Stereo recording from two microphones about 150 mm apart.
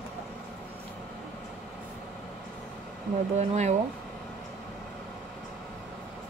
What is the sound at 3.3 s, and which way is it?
Speech, 50° right (ahead or behind).